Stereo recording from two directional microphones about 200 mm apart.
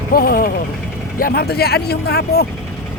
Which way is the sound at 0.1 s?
50° left (ahead or behind).